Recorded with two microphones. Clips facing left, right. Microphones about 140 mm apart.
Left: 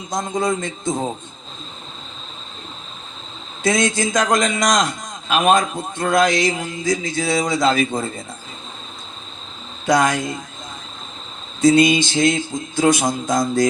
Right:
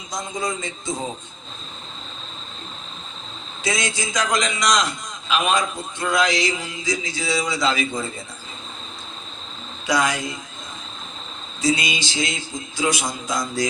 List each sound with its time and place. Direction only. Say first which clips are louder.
0.1 s a man's voice: left 6 dB; 50° left (ahead or behind)
3.6 s a man's voice: left 7 dB; 50° left (ahead or behind)
9.8 s a man's voice: left 5 dB; 50° left (ahead or behind)
11.6 s a man's voice: left 9 dB; 50° left (ahead or behind)